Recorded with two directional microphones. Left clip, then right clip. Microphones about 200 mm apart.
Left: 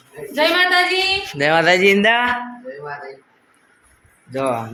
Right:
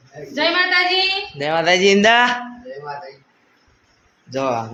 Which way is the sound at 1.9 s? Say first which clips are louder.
Right 2 dB; 25° right (ahead or behind).